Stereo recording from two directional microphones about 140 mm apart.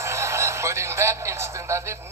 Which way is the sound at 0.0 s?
20° right (ahead or behind).